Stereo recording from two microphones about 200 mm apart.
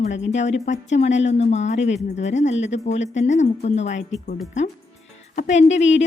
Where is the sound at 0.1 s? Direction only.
35° left (ahead or behind).